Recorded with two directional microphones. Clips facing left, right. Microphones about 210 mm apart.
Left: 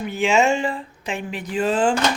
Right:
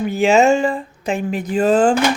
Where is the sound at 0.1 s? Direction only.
40° right (ahead or behind).